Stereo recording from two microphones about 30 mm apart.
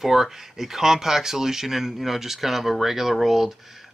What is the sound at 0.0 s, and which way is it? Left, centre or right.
Speech, centre.